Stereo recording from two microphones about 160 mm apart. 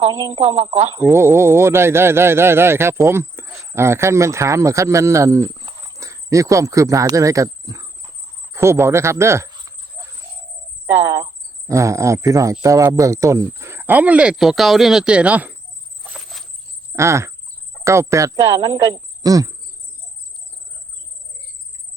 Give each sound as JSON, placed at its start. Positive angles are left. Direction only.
{"t": 0.1, "sound": "speech", "side_deg": -25}
{"t": 0.3, "sound": "speech", "side_deg": -45}
{"t": 1.1, "sound": "speech", "side_deg": -15}
{"t": 8.5, "sound": "cricket", "side_deg": -15}
{"t": 11.7, "sound": "speech", "side_deg": -20}
{"t": 16.0, "sound": "a sound", "side_deg": 0}
{"t": 16.9, "sound": "cricket", "side_deg": -15}
{"t": 17.8, "sound": "speech", "side_deg": -20}